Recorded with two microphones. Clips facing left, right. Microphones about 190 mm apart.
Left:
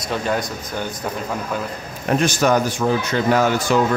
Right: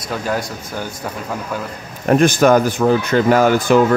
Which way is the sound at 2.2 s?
55° right (ahead or behind).